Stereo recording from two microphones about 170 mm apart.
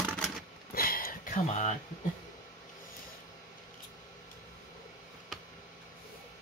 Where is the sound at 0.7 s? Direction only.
60° left (ahead or behind); by 1.7 s 45° left (ahead or behind).